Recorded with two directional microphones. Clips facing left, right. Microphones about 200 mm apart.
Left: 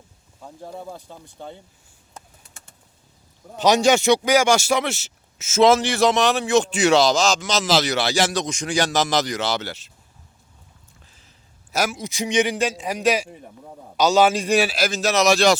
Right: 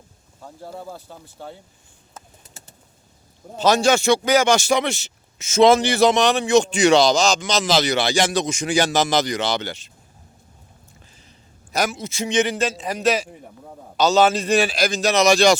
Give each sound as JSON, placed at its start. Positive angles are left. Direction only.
{"t": 3.6, "sound": "a man's voice", "side_deg": 15}
{"t": 11.7, "sound": "a man's voice", "side_deg": 10}